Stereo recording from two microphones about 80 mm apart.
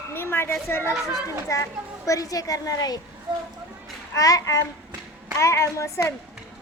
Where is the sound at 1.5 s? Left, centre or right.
Left.